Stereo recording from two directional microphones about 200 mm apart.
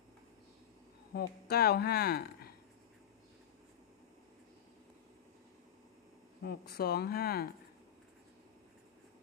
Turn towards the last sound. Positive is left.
turn(degrees=50)  # may be behind; listen again after turning